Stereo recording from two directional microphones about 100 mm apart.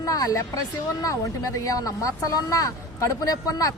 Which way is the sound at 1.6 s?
35° left (ahead or behind).